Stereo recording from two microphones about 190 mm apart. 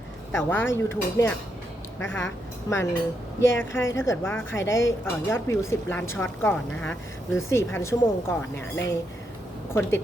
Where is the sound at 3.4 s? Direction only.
80° left.